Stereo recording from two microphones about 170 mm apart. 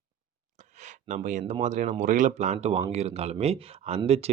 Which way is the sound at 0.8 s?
45° right (ahead or behind).